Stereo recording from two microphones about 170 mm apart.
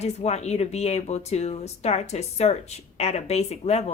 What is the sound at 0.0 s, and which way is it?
Speech, 40° left (ahead or behind).